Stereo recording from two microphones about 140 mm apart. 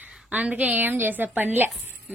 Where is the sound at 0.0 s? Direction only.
10° right (ahead or behind).